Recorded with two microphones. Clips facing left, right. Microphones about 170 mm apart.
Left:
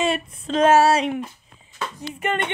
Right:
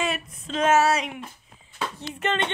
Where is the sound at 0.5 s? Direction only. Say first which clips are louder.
Left 5 dB; 35° left (ahead or behind).